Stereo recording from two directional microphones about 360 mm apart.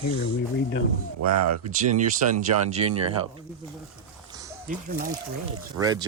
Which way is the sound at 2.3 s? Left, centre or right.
Centre.